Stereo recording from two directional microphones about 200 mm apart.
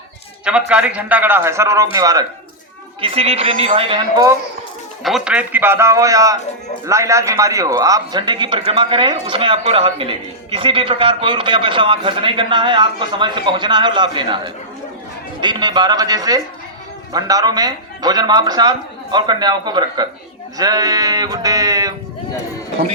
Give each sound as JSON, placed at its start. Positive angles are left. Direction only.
{"t": 0.4, "sound": "a man's voice", "side_deg": -5}
{"t": 5.0, "sound": "a man's voice", "side_deg": -5}